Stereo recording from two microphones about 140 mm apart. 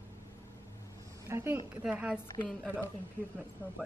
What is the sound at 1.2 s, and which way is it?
Speech, 15° right (ahead or behind).